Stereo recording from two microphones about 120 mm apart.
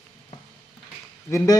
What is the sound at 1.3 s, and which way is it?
Speech, 30° left (ahead or behind).